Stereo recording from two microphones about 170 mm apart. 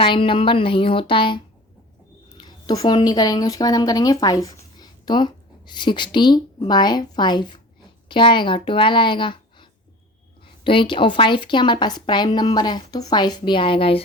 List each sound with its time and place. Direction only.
0.0 s speech: 30° left (ahead or behind)
2.4 s a woman's voice: 25° left (ahead or behind)